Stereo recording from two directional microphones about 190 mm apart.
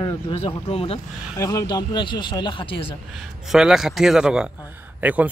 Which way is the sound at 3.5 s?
Centre (ahead or behind).